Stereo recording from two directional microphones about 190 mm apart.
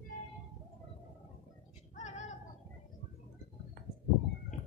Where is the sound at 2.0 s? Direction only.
40° left (ahead or behind).